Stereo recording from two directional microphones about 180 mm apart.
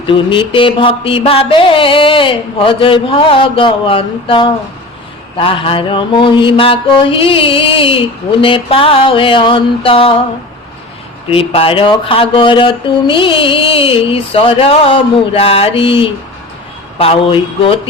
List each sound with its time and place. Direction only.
0.1 s mantra: 30° left (ahead or behind)
11.3 s speech: 30° left (ahead or behind)